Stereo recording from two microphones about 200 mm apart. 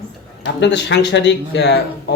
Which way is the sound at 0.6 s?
60° left (ahead or behind).